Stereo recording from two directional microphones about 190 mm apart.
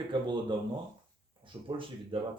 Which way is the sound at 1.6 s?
25° right (ahead or behind).